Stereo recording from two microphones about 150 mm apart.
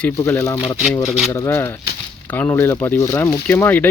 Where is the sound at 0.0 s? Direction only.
15° left (ahead or behind).